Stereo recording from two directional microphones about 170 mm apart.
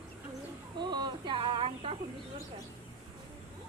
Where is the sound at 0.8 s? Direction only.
25° right (ahead or behind).